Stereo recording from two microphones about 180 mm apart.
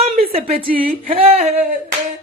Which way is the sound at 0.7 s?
50° right (ahead or behind).